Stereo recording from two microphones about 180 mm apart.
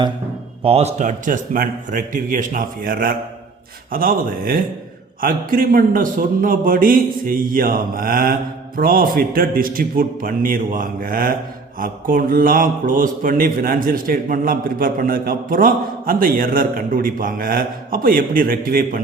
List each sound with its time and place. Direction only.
0.6 s speech: 35° right (ahead or behind); by 19.0 s 55° right (ahead or behind)